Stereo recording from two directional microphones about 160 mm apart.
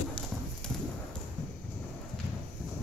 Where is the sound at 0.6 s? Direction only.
5° left (ahead or behind).